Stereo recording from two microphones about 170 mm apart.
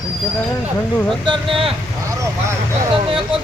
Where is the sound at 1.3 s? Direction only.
30° right (ahead or behind).